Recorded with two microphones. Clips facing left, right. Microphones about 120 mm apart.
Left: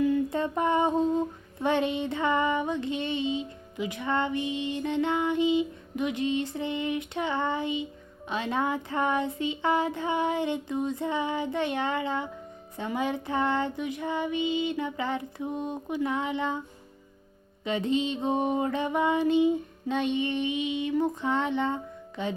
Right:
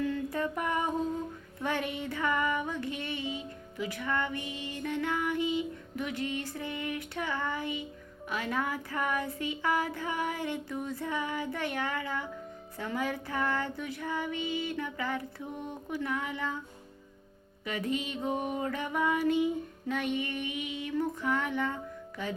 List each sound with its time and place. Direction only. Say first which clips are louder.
0.0 s a sound: left 6 dB; 20° left (ahead or behind)
1.6 s female singing: left 7 dB; 25° left (ahead or behind)
17.7 s female singing: left 6 dB; 25° left (ahead or behind)